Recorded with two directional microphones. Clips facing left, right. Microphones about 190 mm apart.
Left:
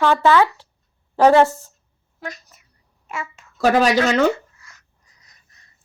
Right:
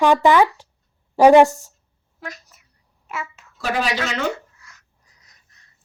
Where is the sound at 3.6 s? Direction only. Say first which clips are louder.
Left 8 dB; 45° left (ahead or behind).